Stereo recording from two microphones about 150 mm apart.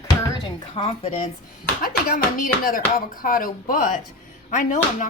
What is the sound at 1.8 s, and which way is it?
Speech, 70° left (ahead or behind).